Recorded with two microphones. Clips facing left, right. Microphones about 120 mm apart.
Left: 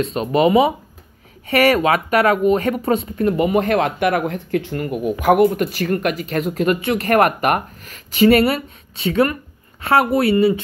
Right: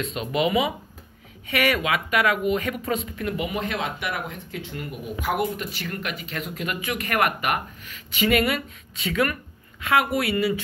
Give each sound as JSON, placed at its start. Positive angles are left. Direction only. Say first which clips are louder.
{"t": 0.0, "sound": "speech", "louder": "left 8 dB", "side_deg": 35}